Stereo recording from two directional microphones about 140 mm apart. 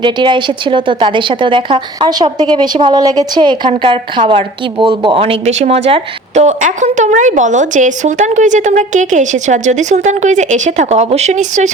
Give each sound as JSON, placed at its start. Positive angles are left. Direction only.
{"t": 0.0, "sound": "speech", "side_deg": -35}